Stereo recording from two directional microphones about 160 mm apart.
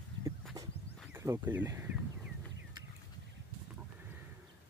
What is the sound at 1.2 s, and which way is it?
Speech, 15° right (ahead or behind).